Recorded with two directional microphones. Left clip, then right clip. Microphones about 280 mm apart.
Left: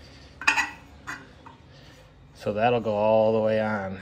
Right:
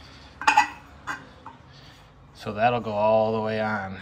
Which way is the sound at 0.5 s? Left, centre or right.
Right.